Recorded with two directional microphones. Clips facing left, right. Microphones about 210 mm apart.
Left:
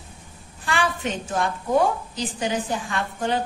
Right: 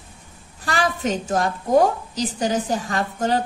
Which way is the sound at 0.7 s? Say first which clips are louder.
Right 3 dB; 40° right (ahead or behind).